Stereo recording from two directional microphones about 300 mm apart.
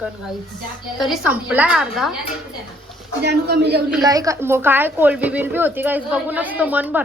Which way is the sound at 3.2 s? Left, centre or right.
Right.